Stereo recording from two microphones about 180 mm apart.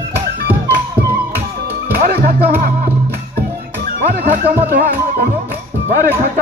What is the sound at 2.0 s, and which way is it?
Music, 60° right (ahead or behind).